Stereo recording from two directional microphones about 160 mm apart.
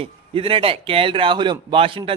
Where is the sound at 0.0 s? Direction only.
35° right (ahead or behind).